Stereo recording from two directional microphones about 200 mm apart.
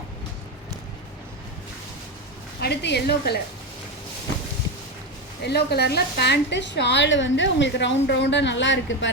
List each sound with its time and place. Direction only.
2.6 s a woman's voice: 55° left (ahead or behind)
5.4 s a woman's voice: 55° left (ahead or behind)